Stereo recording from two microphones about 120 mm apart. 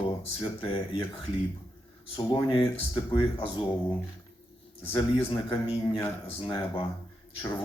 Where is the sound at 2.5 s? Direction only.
40° left (ahead or behind).